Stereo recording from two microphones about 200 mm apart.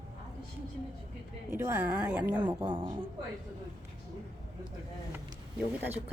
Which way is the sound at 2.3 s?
20° right (ahead or behind).